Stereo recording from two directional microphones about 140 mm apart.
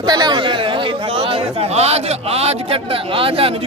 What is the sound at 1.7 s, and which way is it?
A man's voice, 50° right (ahead or behind).